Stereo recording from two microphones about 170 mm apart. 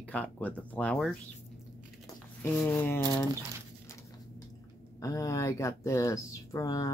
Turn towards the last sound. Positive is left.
turn(degrees=20)  # may be behind; listen again after turning